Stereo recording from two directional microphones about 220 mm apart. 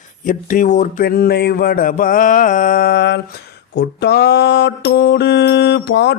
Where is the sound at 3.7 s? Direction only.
50° left (ahead or behind).